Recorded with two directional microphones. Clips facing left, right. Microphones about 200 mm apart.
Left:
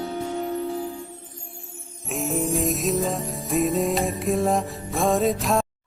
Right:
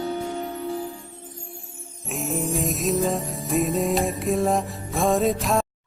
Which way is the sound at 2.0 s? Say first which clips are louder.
Left 2 dB; centre (ahead or behind).